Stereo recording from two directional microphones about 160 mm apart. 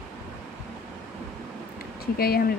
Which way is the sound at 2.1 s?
70° left (ahead or behind).